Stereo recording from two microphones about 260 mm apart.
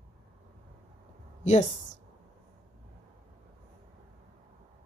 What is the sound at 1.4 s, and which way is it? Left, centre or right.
Speech, left.